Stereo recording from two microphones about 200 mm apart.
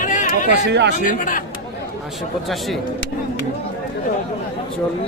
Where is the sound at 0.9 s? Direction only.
40° left (ahead or behind).